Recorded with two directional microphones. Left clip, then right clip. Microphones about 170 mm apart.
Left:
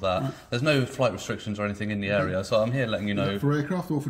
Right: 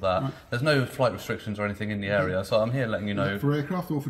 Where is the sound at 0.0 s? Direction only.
25° left (ahead or behind).